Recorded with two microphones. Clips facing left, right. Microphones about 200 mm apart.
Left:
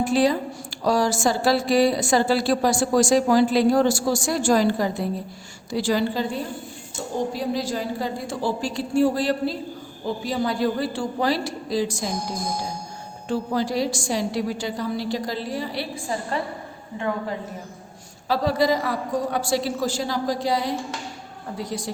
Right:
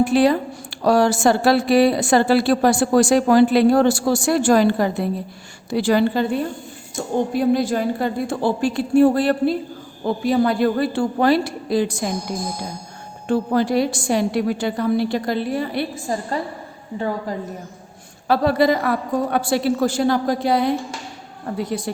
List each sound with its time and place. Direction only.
0.0 s a woman's voice: 60° right (ahead or behind)
13.2 s a woman's voice: 55° right (ahead or behind)
18.3 s a woman's voice: 60° right (ahead or behind)